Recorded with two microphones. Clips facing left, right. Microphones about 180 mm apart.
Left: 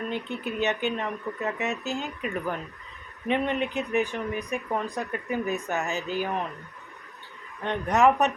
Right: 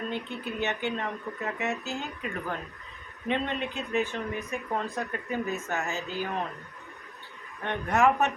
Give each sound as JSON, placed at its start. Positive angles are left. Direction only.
{"t": 0.1, "sound": "speech", "side_deg": 20}
{"t": 7.6, "sound": "a man's voice", "side_deg": 20}